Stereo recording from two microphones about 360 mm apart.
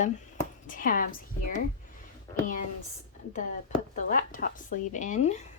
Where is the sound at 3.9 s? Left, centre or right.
Left.